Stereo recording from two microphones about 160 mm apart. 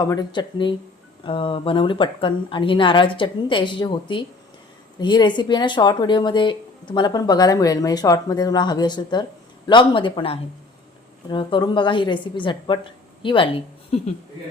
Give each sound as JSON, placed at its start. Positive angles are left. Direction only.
{"t": 0.0, "sound": "speech", "side_deg": 25}